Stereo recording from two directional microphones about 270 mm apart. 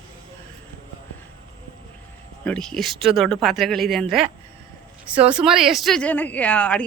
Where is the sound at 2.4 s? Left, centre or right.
Centre.